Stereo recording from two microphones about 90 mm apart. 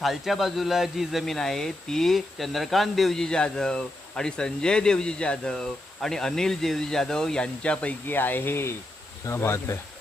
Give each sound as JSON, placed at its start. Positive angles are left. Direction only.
{"t": 0.0, "sound": "speech", "side_deg": 0}